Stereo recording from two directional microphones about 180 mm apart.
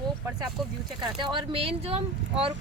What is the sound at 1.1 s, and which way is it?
Speech, 25° right (ahead or behind).